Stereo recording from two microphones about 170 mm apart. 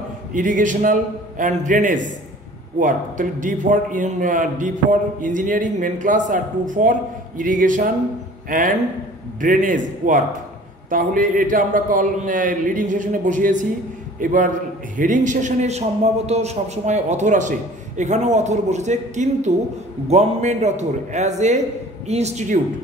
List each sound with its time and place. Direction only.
0.3 s a man's voice: 50° right (ahead or behind)